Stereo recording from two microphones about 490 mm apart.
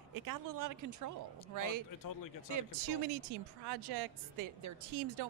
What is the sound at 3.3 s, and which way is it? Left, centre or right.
A woman's voice, right.